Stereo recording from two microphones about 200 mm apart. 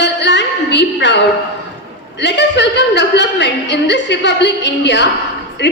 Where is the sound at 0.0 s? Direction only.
60° left (ahead or behind).